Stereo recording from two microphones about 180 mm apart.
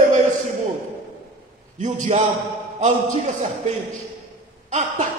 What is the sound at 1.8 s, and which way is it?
Speech, 40° right (ahead or behind).